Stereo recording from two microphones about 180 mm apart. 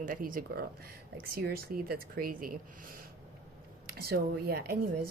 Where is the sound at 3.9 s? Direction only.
55° right (ahead or behind).